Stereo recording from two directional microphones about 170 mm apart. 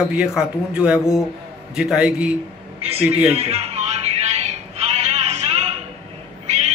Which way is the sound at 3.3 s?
40° right (ahead or behind).